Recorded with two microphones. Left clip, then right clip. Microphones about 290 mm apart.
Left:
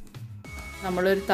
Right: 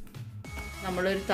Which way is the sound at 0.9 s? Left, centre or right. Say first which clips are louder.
Left 5 dB; left.